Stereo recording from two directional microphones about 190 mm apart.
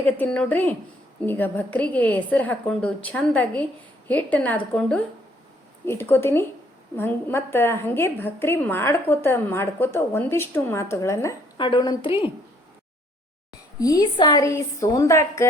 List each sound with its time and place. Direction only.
0.0 s a woman's voice: 5° left (ahead or behind); by 12.1 s 25° left (ahead or behind)
13.7 s a woman's voice: 20° left (ahead or behind)